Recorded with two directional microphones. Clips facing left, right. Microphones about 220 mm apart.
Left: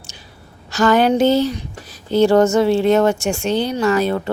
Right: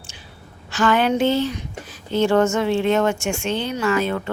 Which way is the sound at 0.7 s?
40° left (ahead or behind).